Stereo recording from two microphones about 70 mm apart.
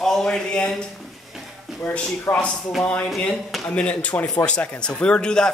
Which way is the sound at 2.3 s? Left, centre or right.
Left.